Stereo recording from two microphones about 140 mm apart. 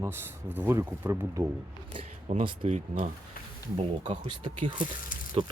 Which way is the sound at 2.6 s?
50° right (ahead or behind).